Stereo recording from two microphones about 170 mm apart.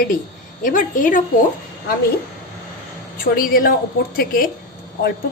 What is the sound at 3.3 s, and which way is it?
A woman's voice, 55° left (ahead or behind).